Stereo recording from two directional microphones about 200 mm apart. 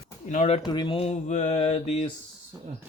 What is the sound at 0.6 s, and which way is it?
Mantra, 20° left (ahead or behind).